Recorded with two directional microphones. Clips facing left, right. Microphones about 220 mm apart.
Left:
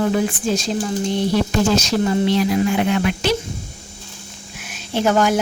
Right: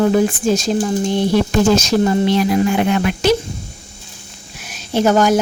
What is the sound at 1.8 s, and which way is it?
Speech, 45° right (ahead or behind).